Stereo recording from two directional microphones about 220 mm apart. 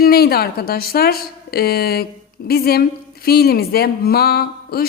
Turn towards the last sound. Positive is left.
turn(degrees=45)  # may be behind; listen again after turning